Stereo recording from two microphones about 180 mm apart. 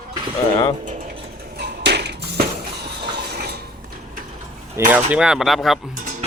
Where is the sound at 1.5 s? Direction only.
70° right (ahead or behind).